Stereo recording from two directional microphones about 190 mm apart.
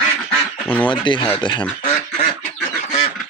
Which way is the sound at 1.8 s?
30° left (ahead or behind).